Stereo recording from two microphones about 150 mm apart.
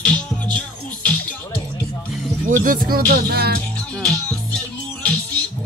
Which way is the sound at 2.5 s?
70° right (ahead or behind).